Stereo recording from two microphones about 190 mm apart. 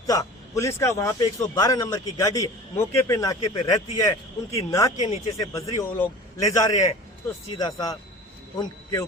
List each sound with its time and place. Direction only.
0.1 s a man's voice: 15° left (ahead or behind)